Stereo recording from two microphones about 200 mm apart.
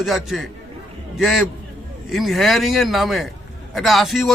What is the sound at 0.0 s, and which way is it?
A man's voice, centre (ahead or behind).